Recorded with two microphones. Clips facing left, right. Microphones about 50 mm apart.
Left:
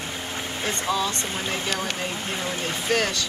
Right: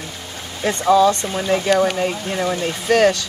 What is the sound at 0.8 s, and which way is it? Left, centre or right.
Speech, right.